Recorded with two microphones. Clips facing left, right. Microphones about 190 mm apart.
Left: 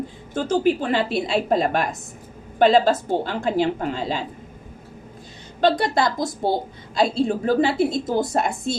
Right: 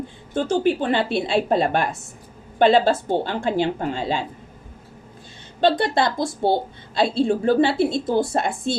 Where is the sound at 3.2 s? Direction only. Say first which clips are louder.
Even; 30° right (ahead or behind).